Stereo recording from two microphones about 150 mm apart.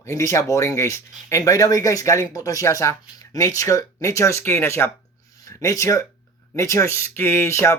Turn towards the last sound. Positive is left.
turn(degrees=20)  # may be behind; listen again after turning